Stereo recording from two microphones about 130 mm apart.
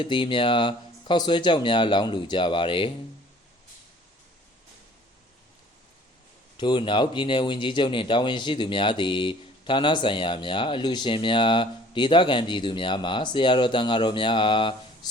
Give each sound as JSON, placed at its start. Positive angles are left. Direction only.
{"t": 0.0, "sound": "speech", "side_deg": 40}
{"t": 6.6, "sound": "speech", "side_deg": 40}